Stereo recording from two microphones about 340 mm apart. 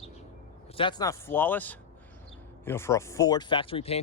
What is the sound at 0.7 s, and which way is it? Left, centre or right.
Speech, centre.